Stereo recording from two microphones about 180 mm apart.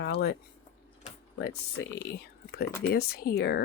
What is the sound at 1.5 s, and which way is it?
Speech, 65° left (ahead or behind).